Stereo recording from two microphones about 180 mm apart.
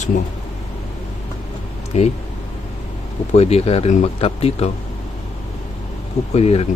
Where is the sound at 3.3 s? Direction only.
35° left (ahead or behind).